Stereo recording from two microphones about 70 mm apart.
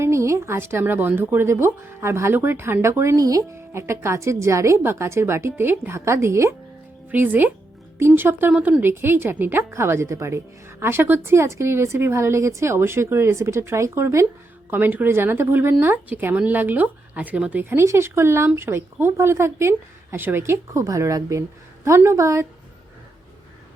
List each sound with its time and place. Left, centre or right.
0.0 s a woman's voice: right
3.2 s speech: right
3.5 s a woman's voice: right
7.1 s a woman's voice: right
14.7 s a woman's voice: right
17.6 s a woman's voice: right